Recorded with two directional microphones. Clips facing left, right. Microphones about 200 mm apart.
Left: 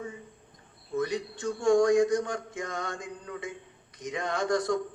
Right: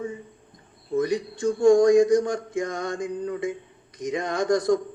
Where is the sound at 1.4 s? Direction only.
35° right (ahead or behind).